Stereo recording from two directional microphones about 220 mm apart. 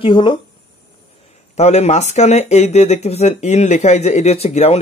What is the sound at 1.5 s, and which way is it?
Speech, 30° left (ahead or behind).